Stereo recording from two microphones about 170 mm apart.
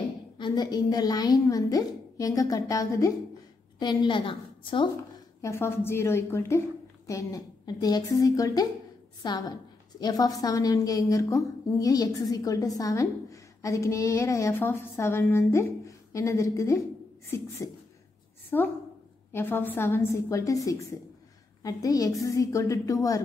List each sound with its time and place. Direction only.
0.4 s a woman's voice: 25° left (ahead or behind)
5.4 s a woman's voice: 15° left (ahead or behind)